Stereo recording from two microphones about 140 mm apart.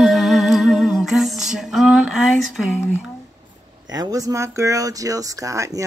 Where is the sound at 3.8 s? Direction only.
25° right (ahead or behind).